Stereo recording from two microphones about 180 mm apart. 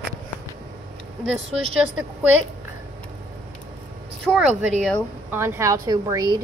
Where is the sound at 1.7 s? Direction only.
5° right (ahead or behind).